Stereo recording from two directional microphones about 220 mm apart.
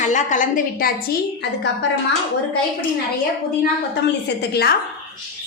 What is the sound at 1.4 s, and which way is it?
Speech, 50° left (ahead or behind).